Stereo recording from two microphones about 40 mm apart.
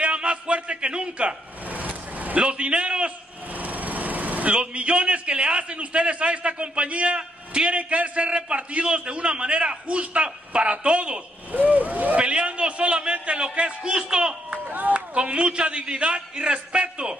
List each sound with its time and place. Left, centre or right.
0.0 s a sound: right
1.7 s vehicle: right
2.4 s a man's voice: right
3.5 s lawn mower: right
4.5 s a man's voice: right
11.5 s speech: right
12.2 s a man's voice: right
14.5 s run: right
15.0 s a man's voice: right